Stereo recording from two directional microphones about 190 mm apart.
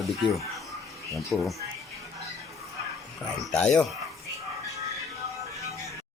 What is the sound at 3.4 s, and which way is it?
Speech, 5° left (ahead or behind).